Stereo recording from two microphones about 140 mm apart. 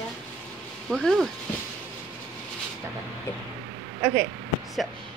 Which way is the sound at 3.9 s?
15° right (ahead or behind).